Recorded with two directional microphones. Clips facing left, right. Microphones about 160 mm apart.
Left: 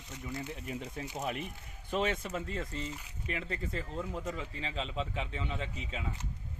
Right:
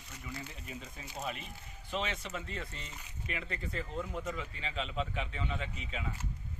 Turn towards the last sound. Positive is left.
turn(degrees=35)  # may be behind; listen again after turning